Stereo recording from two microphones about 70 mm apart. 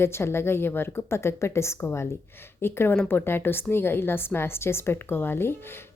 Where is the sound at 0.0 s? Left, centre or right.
Left.